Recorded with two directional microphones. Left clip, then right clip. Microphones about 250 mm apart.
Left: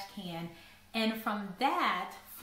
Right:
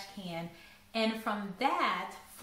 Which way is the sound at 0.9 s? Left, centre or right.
Centre.